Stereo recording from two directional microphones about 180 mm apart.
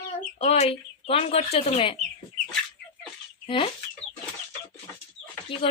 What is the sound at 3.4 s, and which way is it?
Speech, 30° left (ahead or behind).